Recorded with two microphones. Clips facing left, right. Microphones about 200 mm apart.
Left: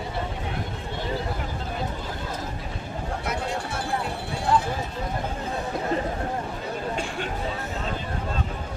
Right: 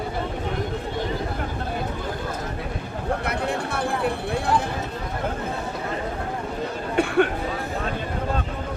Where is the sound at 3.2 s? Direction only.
60° right (ahead or behind).